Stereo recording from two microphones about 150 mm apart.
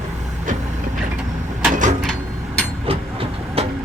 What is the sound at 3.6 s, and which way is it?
Vehicle, 40° right (ahead or behind).